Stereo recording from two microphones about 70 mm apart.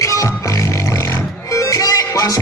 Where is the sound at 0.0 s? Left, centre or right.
Left.